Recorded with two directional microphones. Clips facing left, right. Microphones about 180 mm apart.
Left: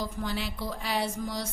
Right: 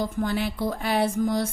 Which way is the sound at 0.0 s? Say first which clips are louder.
Right 7 dB; 50° right (ahead or behind).